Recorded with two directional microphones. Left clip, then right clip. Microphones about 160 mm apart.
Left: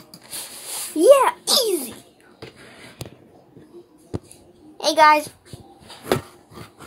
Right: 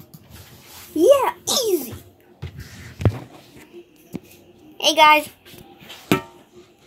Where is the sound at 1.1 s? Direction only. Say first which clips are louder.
Left 4 dB; 15° right (ahead or behind).